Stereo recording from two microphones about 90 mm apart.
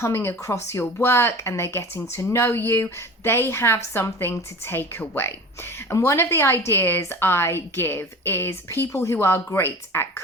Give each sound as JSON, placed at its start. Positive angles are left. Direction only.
{"t": 0.0, "sound": "speech", "side_deg": 30}